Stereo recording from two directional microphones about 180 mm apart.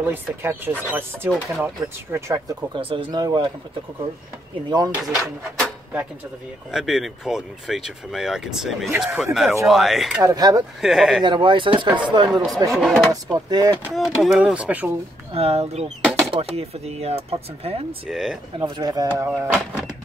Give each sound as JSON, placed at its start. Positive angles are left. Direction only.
{"t": 0.0, "sound": "speech", "side_deg": -10}
{"t": 4.6, "sound": "speech", "side_deg": -20}
{"t": 5.0, "sound": "speech", "side_deg": 0}
{"t": 10.2, "sound": "speech", "side_deg": -20}
{"t": 10.8, "sound": "speech", "side_deg": 0}
{"t": 11.2, "sound": "speech", "side_deg": -25}
{"t": 12.3, "sound": "speech", "side_deg": 0}
{"t": 13.1, "sound": "speech", "side_deg": -20}
{"t": 13.9, "sound": "speech", "side_deg": 0}
{"t": 15.3, "sound": "speech", "side_deg": -35}
{"t": 18.1, "sound": "speech", "side_deg": 0}
{"t": 18.6, "sound": "speech", "side_deg": -20}